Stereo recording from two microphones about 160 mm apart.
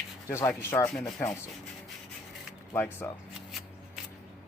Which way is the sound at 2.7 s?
15° left (ahead or behind).